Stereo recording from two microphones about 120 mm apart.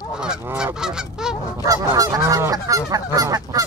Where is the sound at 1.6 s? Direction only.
30° right (ahead or behind).